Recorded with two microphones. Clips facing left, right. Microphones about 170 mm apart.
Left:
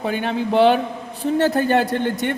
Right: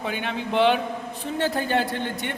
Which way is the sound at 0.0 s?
40° left (ahead or behind).